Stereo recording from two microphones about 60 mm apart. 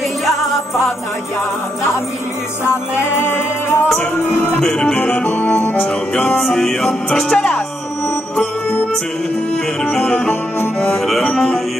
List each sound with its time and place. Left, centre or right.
3.2 s music: left
4.6 s music: centre
5.2 s music: left
5.9 s music: centre
9.8 s music: centre
11.0 s music: centre
11.2 s music: centre